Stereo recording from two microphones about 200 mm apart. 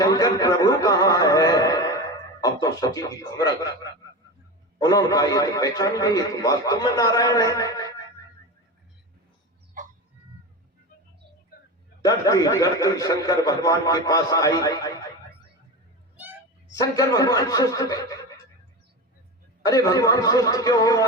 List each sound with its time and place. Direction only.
0.0 s music: 20° left (ahead or behind)
2.4 s speech: 15° left (ahead or behind)
4.8 s a man's voice: 20° left (ahead or behind)
12.0 s a man's voice: 15° left (ahead or behind)
16.1 s a sound: 10° right (ahead or behind)
16.7 s a man's voice: 15° left (ahead or behind)
19.6 s a man's voice: 20° left (ahead or behind)